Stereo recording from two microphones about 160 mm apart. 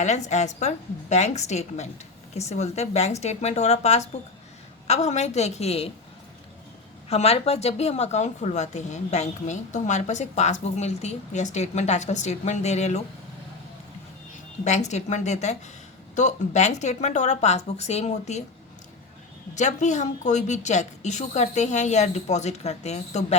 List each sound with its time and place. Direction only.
0.0 s a woman's voice: 45° left (ahead or behind)
7.1 s a woman's voice: 40° left (ahead or behind)
14.6 s a woman's voice: 45° left (ahead or behind)
19.5 s a woman's voice: 50° left (ahead or behind)